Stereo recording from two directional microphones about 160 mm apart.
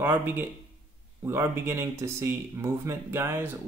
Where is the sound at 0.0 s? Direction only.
10° right (ahead or behind).